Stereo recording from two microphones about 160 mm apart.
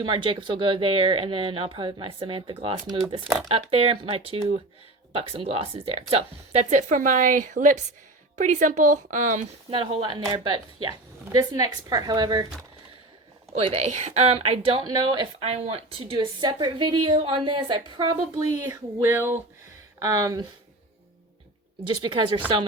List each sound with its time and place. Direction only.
0.0 s a woman's voice: 30° right (ahead or behind); by 9.5 s 50° right (ahead or behind)
9.6 s a woman's voice: 35° right (ahead or behind)
13.6 s speech: 40° right (ahead or behind)
14.8 s speech: 25° right (ahead or behind)
16.1 s a woman's voice: 30° right (ahead or behind)
21.8 s speech: 30° right (ahead or behind)